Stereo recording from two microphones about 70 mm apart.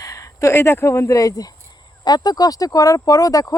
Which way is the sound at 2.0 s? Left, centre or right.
Left.